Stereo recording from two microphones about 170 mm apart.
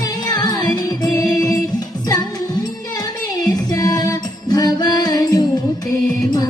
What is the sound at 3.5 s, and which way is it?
Music, 20° left (ahead or behind).